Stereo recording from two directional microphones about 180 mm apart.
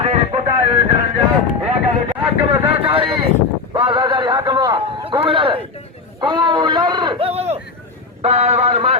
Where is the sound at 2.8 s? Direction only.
30° right (ahead or behind).